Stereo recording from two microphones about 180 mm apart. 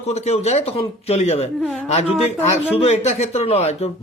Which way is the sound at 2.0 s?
5° right (ahead or behind).